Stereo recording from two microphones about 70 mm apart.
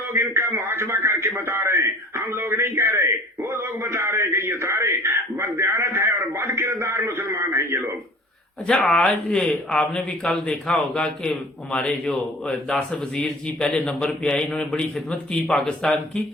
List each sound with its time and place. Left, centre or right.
0.1 s a man's voice: right
8.6 s a man's voice: centre